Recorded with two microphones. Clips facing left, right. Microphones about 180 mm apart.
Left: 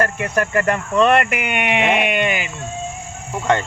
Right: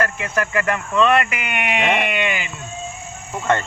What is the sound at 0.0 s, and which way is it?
Speech, 40° left (ahead or behind).